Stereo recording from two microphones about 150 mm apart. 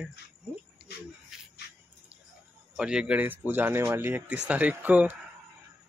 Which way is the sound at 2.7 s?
5° right (ahead or behind).